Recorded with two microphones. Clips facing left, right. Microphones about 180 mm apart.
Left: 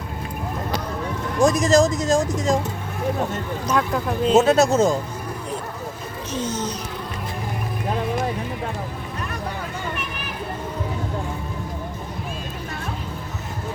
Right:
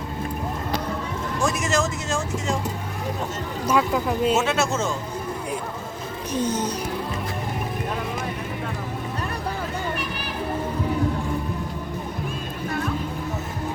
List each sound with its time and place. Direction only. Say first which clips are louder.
1.4 s speech: left 8 dB; 35° left (ahead or behind)
3.7 s speech: right 1 dB; 5° right (ahead or behind)
4.4 s speech: left 7 dB; 35° left (ahead or behind)
6.3 s speech: right 2 dB; 10° right (ahead or behind)